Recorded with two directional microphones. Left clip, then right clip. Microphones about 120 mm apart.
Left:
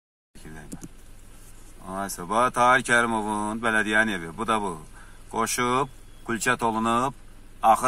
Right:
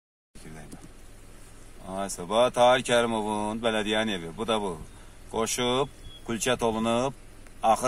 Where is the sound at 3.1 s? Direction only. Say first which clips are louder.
Left 2 dB; 55° left (ahead or behind).